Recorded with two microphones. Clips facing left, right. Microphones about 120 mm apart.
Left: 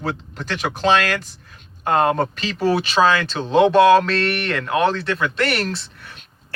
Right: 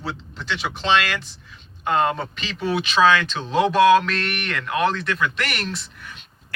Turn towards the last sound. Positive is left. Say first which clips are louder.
# left 6 dB
turn(degrees=30)  # may be behind; listen again after turning